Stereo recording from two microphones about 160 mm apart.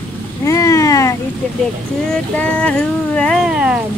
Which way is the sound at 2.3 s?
10° left (ahead or behind).